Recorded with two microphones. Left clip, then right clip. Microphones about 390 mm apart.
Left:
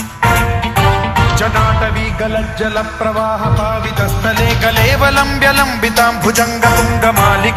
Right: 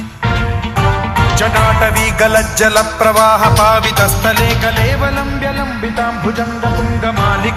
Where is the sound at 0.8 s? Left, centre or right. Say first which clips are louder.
Left 1 dB; centre; by 2.4 s right.